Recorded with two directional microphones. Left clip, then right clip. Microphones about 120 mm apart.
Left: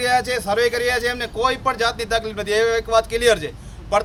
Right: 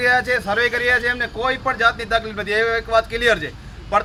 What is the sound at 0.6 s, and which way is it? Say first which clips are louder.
Speech: right 1 dB; 20° left (ahead or behind).